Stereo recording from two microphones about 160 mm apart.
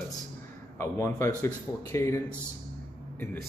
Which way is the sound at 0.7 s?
15° left (ahead or behind).